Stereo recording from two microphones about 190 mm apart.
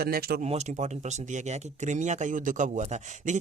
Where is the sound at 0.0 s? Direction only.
55° right (ahead or behind).